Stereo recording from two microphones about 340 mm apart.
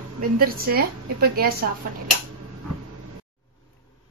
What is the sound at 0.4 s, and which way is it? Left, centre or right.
Speech, right.